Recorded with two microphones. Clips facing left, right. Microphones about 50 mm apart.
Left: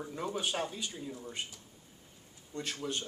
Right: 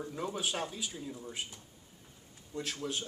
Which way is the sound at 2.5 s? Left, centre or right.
Centre.